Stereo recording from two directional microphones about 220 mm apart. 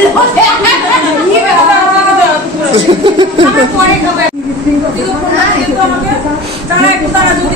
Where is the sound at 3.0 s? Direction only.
20° right (ahead or behind).